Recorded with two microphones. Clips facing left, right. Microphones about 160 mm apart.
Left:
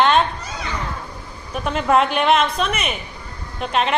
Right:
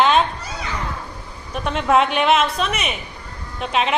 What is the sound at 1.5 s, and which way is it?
A woman's voice, centre (ahead or behind).